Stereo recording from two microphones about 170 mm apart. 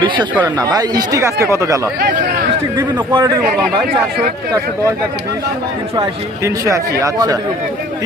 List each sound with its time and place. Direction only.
0.4 s speech: 20° right (ahead or behind)
6.0 s speech: 20° right (ahead or behind)